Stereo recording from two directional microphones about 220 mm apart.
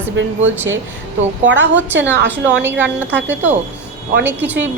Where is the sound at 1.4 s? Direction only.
55° right (ahead or behind).